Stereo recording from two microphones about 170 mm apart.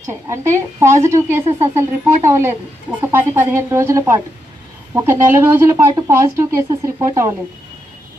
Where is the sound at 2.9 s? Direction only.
15° right (ahead or behind).